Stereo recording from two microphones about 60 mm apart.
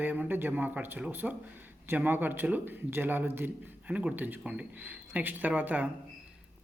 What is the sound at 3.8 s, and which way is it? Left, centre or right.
Speech, right.